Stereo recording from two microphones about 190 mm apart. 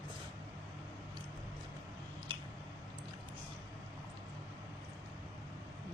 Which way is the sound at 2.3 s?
25° right (ahead or behind).